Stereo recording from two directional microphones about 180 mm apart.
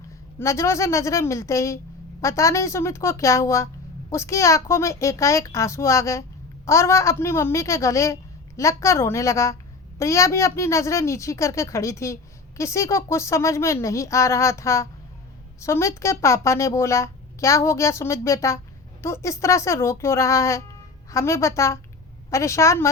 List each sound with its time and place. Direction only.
0.3 s speech: 15° left (ahead or behind)